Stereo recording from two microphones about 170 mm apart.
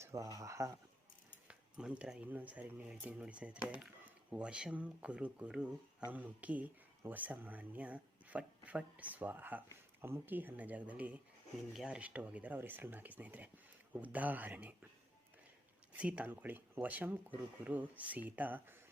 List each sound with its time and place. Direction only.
0.0 s speech: 20° right (ahead or behind)
1.5 s speech: 5° right (ahead or behind)
15.9 s speech: 10° right (ahead or behind)